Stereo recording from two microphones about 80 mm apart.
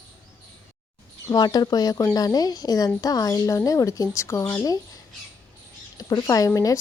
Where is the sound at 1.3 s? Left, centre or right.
Left.